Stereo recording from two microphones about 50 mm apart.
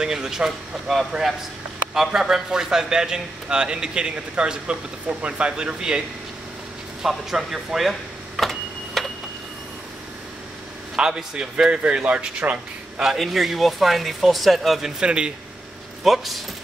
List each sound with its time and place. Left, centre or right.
0.0 s speech: centre
7.0 s a sound: centre
11.0 s a man's voice: centre
13.0 s speech: centre
15.0 s a man's voice: centre
16.0 s speech: centre